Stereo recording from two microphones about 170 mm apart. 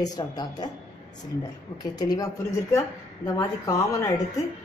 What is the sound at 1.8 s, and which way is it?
Speech, 25° left (ahead or behind).